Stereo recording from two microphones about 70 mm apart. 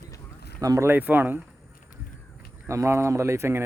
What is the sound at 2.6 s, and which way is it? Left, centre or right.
Speech, right.